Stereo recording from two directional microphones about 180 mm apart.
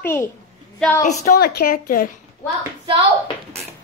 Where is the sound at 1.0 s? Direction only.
40° left (ahead or behind).